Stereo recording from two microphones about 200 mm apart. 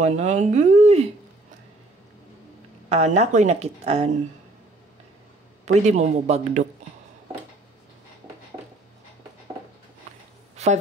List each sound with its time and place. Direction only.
0.0 s a woman's voice: 35° right (ahead or behind)
2.9 s a woman's voice: 35° right (ahead or behind)
5.7 s a woman's voice: 35° right (ahead or behind)
10.5 s a sound: 35° right (ahead or behind)